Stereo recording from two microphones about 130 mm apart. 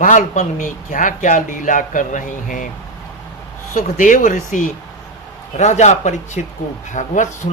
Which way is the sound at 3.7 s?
90° left.